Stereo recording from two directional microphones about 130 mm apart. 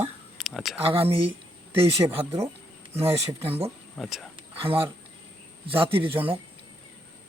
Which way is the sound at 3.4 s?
50° right (ahead or behind).